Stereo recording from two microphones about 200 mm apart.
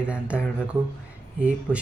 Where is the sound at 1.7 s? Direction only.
5° right (ahead or behind).